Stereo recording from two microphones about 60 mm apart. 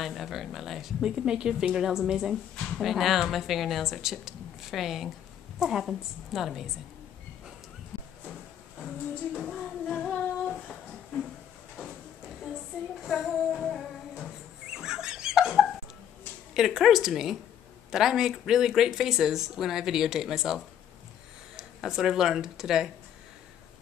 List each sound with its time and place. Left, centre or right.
0.0 s speech: centre
7.9 s a sound: centre
8.7 s music: centre
13.0 s child singing: centre
14.7 s fowl: centre
16.5 s speech: centre